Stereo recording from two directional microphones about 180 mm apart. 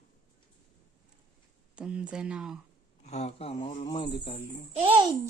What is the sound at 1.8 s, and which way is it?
Speech, 5° right (ahead or behind).